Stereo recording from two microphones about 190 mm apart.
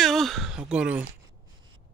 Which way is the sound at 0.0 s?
Centre (ahead or behind).